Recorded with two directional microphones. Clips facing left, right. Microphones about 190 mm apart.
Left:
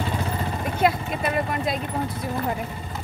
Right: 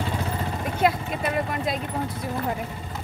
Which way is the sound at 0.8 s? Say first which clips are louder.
Left 1 dB; centre (ahead or behind).